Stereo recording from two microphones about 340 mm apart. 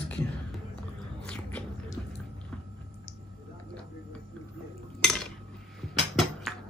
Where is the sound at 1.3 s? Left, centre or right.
Centre.